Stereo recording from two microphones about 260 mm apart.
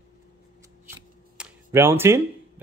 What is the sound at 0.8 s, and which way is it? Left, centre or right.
Shuffling cards, centre.